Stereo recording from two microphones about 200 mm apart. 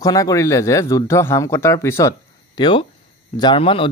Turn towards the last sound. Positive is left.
turn(degrees=25)  # may be behind; listen again after turning